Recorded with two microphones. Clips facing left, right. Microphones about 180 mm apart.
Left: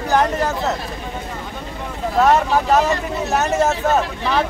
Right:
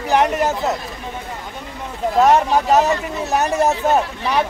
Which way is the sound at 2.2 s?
15° right (ahead or behind).